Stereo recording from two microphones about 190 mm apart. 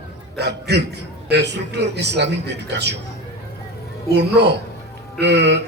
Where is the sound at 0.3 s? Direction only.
65° right (ahead or behind).